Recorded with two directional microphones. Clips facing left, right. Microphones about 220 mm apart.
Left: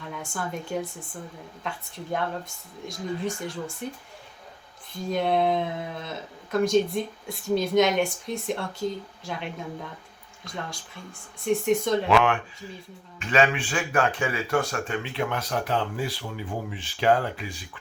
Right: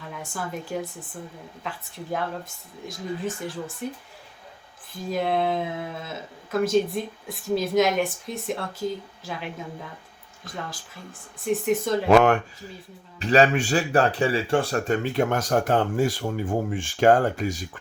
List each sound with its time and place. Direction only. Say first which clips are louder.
0.0 s speech: even; centre (ahead or behind)
2.8 s speech: even; centre (ahead or behind)
4.9 s speech: left 1 dB; centre (ahead or behind)
11.4 s speech: even; centre (ahead or behind)
12.0 s speech: right 10 dB; 45° right (ahead or behind)